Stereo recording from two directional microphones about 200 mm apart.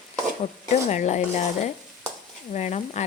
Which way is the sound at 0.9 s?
35° left (ahead or behind).